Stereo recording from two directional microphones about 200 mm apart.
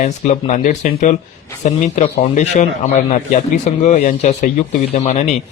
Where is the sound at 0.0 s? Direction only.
40° left (ahead or behind).